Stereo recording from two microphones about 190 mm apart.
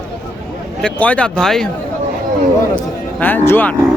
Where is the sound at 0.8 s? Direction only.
5° left (ahead or behind).